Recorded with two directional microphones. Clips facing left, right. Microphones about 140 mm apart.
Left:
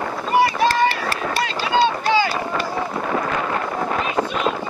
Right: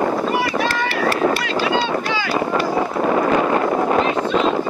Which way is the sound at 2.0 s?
35° left (ahead or behind).